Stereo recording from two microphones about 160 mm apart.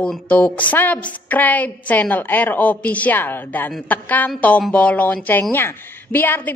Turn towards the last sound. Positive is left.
turn(degrees=10)  # may be behind; listen again after turning